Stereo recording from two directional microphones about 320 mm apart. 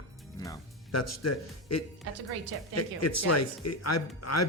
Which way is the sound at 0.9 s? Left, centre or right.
Left.